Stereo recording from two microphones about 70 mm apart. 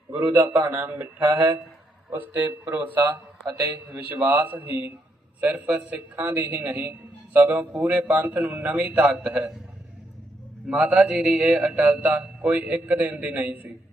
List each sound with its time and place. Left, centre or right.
0.1 s mantra: right
7.3 s speech: right
7.7 s mantra: right
10.7 s mantra: centre